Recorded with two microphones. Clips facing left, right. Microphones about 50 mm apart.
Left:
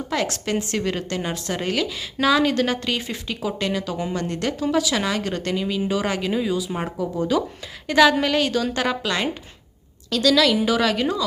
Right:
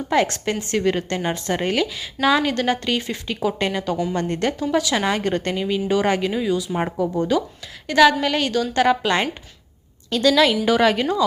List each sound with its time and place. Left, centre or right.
0.3 s a woman's voice: centre
4.9 s a woman's voice: centre
6.7 s a woman's voice: centre
7.1 s a woman's voice: centre
9.0 s a woman's voice: right